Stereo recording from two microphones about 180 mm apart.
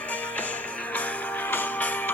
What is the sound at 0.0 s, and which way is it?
Music, 10° left (ahead or behind).